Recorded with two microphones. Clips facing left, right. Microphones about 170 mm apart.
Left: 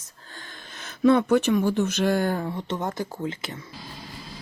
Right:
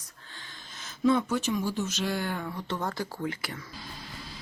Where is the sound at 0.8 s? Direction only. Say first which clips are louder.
Left 6 dB; 65° left (ahead or behind); by 2.4 s 45° left (ahead or behind).